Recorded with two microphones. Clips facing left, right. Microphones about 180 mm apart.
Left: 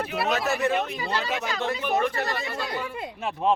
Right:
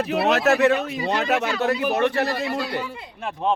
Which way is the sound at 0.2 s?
70° right (ahead or behind).